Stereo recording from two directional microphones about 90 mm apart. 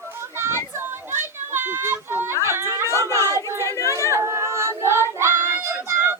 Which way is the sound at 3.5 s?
35° left (ahead or behind).